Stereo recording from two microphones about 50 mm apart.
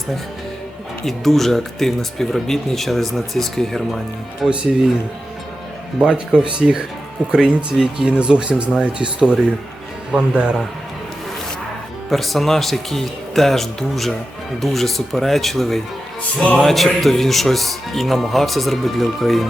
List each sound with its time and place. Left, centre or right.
1.0 s speech: centre
4.4 s speech: centre
6.0 s speech: centre
12.1 s speech: centre